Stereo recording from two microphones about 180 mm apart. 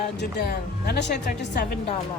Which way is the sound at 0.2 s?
65° left (ahead or behind).